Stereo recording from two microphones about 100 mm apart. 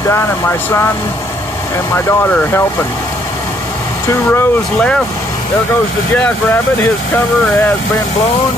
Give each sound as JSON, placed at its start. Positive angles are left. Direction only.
{"t": 0.1, "sound": "speech", "side_deg": 25}
{"t": 2.0, "sound": "speech", "side_deg": 20}
{"t": 4.1, "sound": "speech", "side_deg": 25}